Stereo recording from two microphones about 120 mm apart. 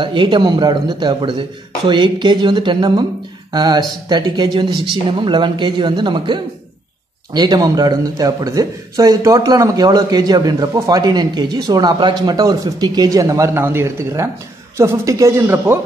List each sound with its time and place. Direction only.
0.0 s a man's voice: 45° right (ahead or behind); by 15.8 s 20° right (ahead or behind)